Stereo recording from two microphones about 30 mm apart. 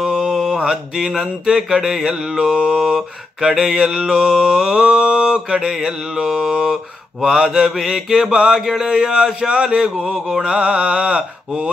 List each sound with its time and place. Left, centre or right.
0.0 s mantra: centre; by 2.8 s right
2.8 s mantra: centre
8.3 s mantra: right
8.5 s mantra: centre
10.1 s mantra: centre
10.4 s mantra: right